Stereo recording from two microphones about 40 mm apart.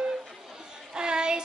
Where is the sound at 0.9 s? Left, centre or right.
Right.